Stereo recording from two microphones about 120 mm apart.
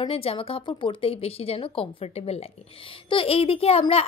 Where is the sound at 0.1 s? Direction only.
55° left (ahead or behind).